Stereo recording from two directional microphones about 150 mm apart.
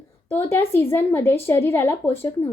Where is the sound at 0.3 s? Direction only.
15° left (ahead or behind).